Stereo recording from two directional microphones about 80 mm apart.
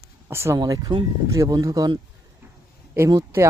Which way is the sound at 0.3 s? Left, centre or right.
Right.